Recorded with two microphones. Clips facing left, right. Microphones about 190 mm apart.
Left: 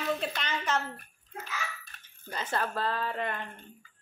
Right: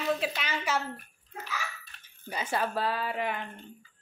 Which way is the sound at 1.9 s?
45° left (ahead or behind).